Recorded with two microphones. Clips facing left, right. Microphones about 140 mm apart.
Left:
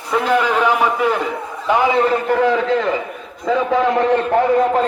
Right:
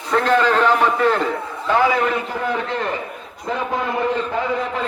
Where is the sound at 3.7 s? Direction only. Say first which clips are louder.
Left 6 dB; 90° left; by 4.8 s 50° left (ahead or behind).